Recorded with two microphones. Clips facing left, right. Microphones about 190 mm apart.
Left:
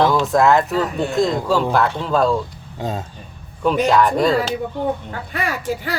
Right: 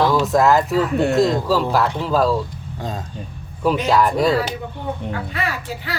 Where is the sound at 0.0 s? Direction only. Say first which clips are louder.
Left 1 dB; centre (ahead or behind).